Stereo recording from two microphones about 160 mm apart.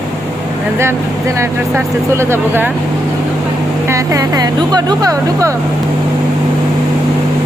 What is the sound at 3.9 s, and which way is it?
Speech, 20° right (ahead or behind).